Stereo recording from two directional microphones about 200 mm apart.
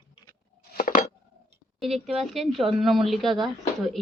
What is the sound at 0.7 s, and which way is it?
Dishes, 45° left (ahead or behind).